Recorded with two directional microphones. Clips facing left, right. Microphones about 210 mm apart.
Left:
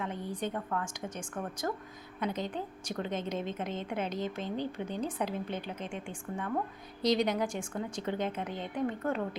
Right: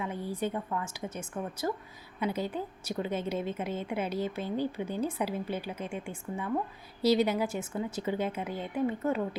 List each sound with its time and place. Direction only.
0.0 s a woman's voice: 10° right (ahead or behind)